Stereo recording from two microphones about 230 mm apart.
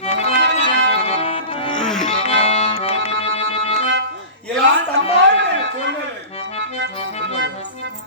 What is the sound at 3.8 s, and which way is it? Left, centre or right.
Music, right.